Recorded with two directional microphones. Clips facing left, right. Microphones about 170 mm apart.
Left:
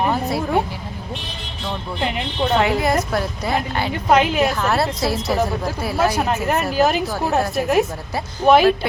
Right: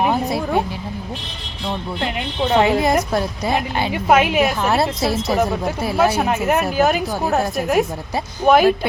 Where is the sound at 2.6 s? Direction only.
20° right (ahead or behind); by 4.5 s 5° right (ahead or behind).